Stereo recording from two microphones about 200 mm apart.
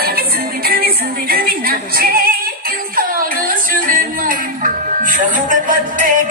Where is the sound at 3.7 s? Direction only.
45° right (ahead or behind).